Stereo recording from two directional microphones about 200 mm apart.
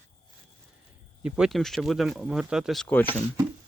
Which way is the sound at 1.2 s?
Centre (ahead or behind).